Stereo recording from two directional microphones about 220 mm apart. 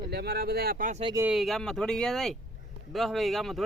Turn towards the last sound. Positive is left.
turn(degrees=0)  # may be behind; listen again after turning